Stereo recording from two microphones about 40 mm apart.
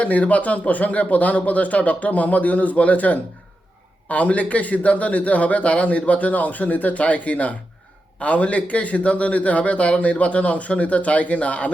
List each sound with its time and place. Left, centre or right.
0.0 s a man's voice: left